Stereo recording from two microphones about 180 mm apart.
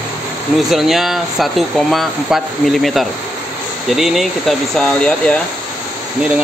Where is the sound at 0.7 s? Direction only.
Centre (ahead or behind).